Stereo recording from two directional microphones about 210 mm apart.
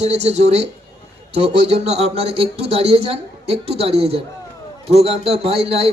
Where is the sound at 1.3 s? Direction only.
30° right (ahead or behind).